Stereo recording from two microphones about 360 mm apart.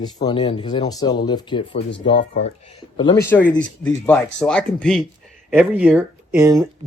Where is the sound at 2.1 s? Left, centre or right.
Left.